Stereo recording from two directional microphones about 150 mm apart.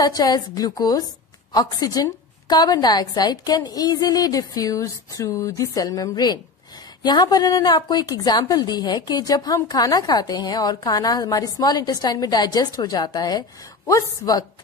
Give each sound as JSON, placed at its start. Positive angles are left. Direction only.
{"t": 0.0, "sound": "a woman's voice", "side_deg": 25}